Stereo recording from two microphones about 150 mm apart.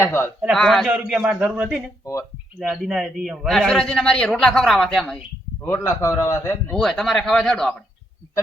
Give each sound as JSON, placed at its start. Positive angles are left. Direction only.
{"t": 0.0, "sound": "a man's voice", "side_deg": 15}
{"t": 0.5, "sound": "a man's voice", "side_deg": 0}
{"t": 5.6, "sound": "a man's voice", "side_deg": 15}
{"t": 6.7, "sound": "a man's voice", "side_deg": 0}